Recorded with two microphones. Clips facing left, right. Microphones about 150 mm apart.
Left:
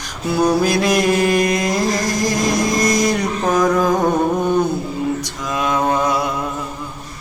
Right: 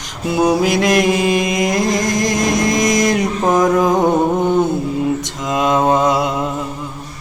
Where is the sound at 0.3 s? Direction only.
20° right (ahead or behind).